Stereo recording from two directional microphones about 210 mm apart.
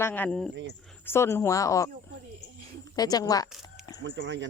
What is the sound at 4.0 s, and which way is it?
Speech, 60° right (ahead or behind).